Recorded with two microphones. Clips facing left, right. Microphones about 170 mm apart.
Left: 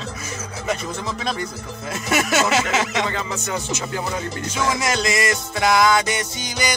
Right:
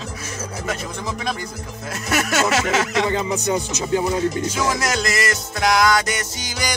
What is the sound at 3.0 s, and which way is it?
Music, 20° right (ahead or behind).